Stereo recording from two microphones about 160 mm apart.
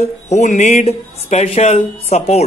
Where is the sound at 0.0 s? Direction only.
45° left (ahead or behind).